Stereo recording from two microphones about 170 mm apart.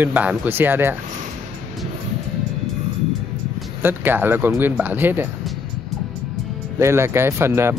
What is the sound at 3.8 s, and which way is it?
Speech, 10° right (ahead or behind).